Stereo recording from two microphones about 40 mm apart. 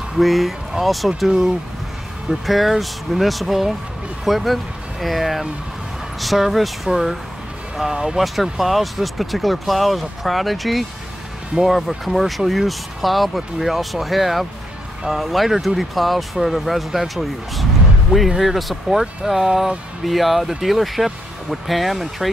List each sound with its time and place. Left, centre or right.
0.2 s speech: centre
2.4 s speech: centre
7.9 s speech: centre
8.2 s speech: centre